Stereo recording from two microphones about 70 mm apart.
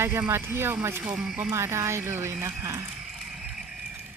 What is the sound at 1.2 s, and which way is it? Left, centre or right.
Speech, centre.